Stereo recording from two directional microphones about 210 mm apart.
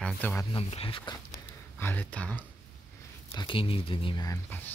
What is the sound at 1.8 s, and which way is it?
Speech, 5° left (ahead or behind).